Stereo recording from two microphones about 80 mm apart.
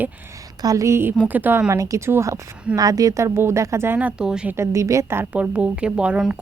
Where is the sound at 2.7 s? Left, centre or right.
Right.